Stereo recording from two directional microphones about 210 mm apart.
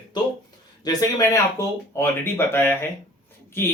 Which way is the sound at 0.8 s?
20° left (ahead or behind).